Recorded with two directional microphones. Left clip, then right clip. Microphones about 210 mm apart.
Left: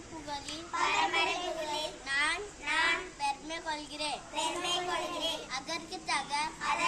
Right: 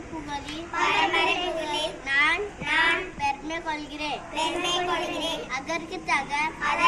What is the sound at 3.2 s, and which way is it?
A woman's voice, 15° left (ahead or behind).